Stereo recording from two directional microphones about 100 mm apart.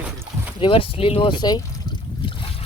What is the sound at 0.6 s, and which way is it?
Boat, 65° left (ahead or behind).